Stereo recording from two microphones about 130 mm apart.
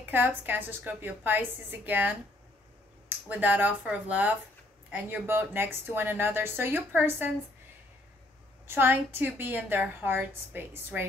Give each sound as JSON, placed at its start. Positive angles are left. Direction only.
{"t": 0.0, "sound": "a woman's voice", "side_deg": -15}
{"t": 8.6, "sound": "a woman's voice", "side_deg": -15}